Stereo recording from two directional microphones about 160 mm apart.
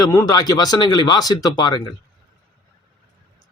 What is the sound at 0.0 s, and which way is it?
Speech, 20° left (ahead or behind).